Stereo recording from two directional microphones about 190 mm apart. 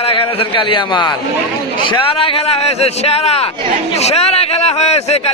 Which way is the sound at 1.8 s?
25° left (ahead or behind).